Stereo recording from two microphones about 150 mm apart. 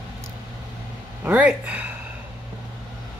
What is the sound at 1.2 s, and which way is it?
Speech, 10° right (ahead or behind).